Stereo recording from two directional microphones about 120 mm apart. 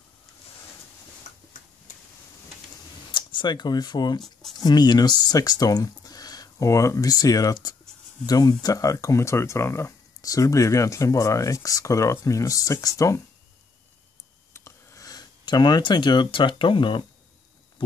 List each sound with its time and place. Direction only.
3.1 s speech: 40° left (ahead or behind)
4.2 s speech: centre (ahead or behind)
4.6 s speech: 35° left (ahead or behind)
14.5 s a sound: 25° left (ahead or behind); by 17.0 s 45° left (ahead or behind)